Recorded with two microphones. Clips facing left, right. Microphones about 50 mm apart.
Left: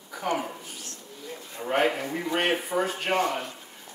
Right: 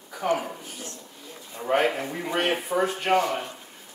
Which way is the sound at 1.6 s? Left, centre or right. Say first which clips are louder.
Right 2 dB; centre.